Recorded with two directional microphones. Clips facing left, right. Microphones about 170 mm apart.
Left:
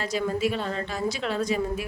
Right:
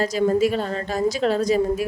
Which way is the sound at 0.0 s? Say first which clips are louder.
Right 7 dB; 40° right (ahead or behind).